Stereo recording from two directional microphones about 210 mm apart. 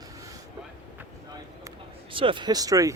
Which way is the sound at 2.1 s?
25° right (ahead or behind).